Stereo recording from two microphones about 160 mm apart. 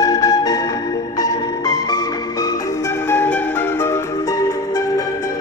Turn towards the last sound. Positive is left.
turn(degrees=20)  # may be behind; listen again after turning